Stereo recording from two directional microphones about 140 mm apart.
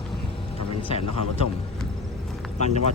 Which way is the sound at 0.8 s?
40° left (ahead or behind).